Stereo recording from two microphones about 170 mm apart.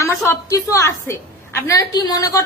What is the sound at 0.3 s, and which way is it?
A woman's voice, 20° left (ahead or behind).